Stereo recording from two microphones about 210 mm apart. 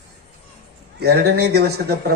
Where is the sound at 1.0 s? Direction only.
50° right (ahead or behind).